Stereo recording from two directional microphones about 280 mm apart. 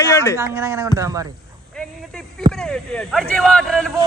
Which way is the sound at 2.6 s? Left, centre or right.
Centre.